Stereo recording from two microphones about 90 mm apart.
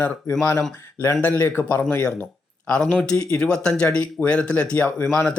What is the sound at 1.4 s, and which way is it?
Speech, 20° left (ahead or behind).